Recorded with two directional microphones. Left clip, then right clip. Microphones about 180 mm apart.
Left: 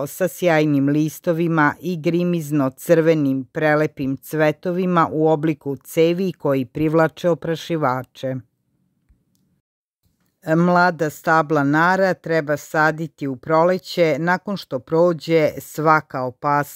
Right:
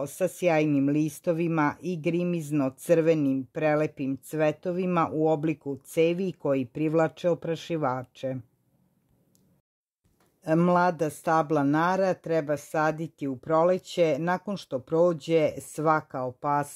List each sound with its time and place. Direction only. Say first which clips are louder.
0.0 s speech: left 6 dB; 25° left (ahead or behind)
10.4 s speech: left 7 dB; 20° left (ahead or behind)